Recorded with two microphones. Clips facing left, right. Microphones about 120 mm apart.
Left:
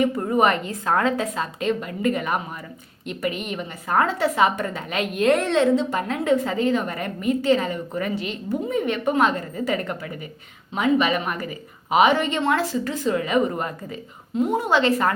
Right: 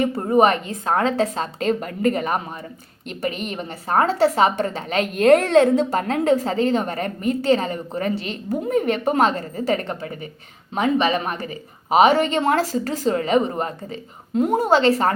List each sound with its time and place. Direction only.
0.0 s speech: 30° right (ahead or behind)
5.1 s speech: 45° right (ahead or behind)
8.6 s speech: 45° right (ahead or behind); by 14.0 s 25° right (ahead or behind)
14.3 s speech: 40° right (ahead or behind)